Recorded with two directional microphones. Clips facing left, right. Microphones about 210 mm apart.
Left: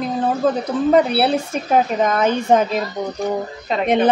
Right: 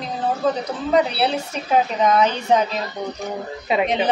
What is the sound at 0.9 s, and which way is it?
A woman's voice, 50° left (ahead or behind).